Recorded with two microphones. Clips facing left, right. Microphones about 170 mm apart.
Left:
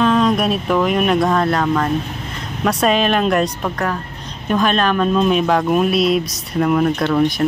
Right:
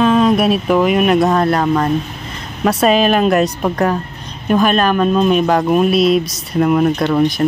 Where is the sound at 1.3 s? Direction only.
5° right (ahead or behind).